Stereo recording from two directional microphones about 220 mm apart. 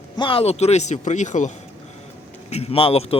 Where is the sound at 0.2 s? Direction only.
25° left (ahead or behind).